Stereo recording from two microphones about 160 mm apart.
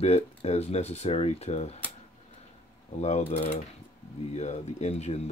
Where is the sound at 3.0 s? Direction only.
45° left (ahead or behind).